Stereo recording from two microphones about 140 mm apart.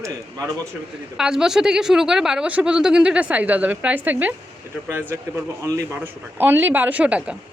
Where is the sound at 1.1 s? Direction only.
5° right (ahead or behind).